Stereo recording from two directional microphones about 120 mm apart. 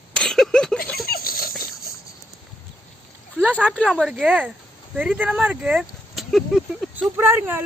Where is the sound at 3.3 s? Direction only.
10° left (ahead or behind).